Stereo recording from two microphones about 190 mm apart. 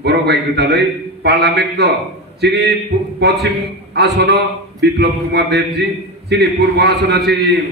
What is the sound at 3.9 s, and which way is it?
A man's voice, 65° right (ahead or behind).